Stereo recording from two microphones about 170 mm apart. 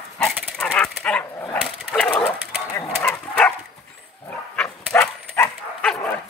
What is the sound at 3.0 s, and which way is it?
Dog, 5° left (ahead or behind).